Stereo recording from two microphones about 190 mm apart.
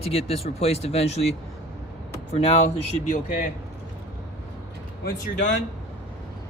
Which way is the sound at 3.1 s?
45° left (ahead or behind).